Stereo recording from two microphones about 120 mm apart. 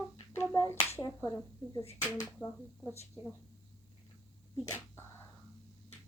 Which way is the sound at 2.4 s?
25° left (ahead or behind).